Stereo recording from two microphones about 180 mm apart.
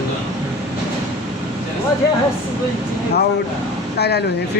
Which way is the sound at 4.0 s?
65° left (ahead or behind).